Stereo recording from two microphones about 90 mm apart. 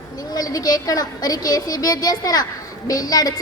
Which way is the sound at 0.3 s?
45° left (ahead or behind).